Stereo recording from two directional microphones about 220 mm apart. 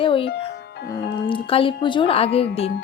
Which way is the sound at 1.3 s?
25° left (ahead or behind).